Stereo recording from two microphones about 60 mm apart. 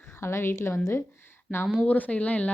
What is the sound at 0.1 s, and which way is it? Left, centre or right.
Speech, left.